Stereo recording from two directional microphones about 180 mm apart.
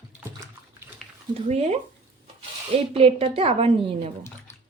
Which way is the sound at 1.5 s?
35° right (ahead or behind).